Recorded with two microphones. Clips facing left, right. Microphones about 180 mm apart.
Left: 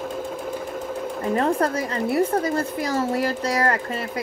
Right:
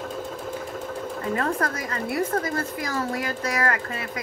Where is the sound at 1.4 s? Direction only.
30° left (ahead or behind).